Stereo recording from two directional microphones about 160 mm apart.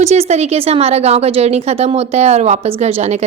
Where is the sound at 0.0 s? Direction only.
40° right (ahead or behind).